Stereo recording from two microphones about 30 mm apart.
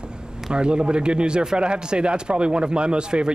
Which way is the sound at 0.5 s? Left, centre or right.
Right.